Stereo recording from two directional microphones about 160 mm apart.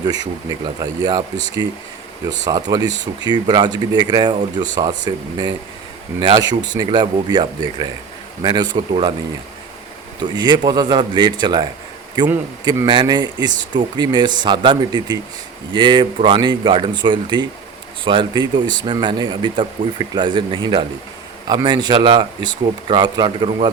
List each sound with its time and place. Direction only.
0.0 s speech: 25° right (ahead or behind)
10.3 s speech: 25° right (ahead or behind)